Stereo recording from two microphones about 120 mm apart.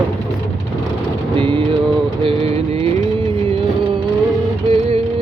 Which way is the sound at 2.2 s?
50° right (ahead or behind).